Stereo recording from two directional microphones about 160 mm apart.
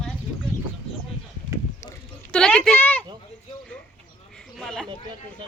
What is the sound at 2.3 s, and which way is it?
Speech, 5° left (ahead or behind).